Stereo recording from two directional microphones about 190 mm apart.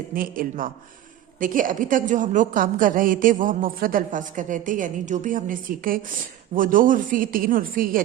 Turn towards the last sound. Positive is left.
turn(degrees=-50)  # may be behind; listen again after turning